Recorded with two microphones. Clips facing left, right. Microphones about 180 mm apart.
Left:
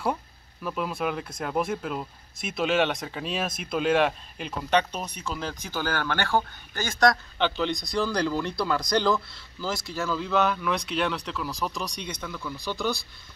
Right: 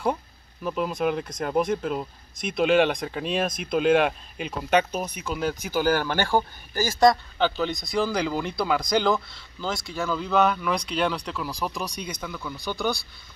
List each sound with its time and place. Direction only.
0.7 s speech: centre (ahead or behind)
7.3 s speech: 40° right (ahead or behind)
7.7 s speech: centre (ahead or behind)